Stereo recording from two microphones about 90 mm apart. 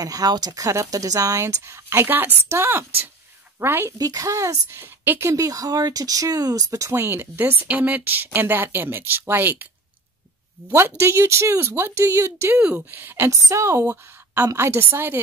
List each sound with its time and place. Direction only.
0.0 s speech: 45° right (ahead or behind)
0.7 s speech: 40° right (ahead or behind)
4.0 s speech: 40° right (ahead or behind); by 5.3 s 25° right (ahead or behind)
5.3 s speech: 40° right (ahead or behind); by 9.7 s 20° right (ahead or behind)
10.7 s speech: 30° right (ahead or behind)
12.5 s speech: 15° right (ahead or behind)